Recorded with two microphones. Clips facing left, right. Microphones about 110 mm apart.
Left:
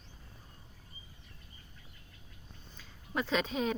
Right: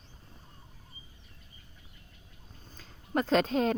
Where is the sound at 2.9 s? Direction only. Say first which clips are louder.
Right 6 dB; 45° right (ahead or behind).